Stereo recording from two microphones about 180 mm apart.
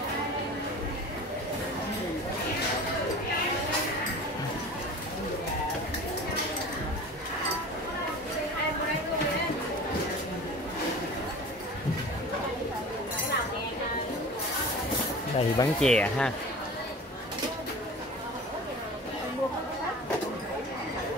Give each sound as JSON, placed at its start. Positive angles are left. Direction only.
{"t": 15.3, "sound": "speech", "side_deg": 25}
{"t": 15.8, "sound": "speech", "side_deg": 5}